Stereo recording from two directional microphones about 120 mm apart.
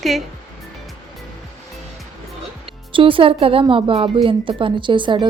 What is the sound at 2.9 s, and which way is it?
Speech, 45° right (ahead or behind).